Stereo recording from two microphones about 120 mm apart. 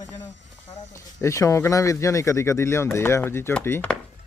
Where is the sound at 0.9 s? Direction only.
25° left (ahead or behind).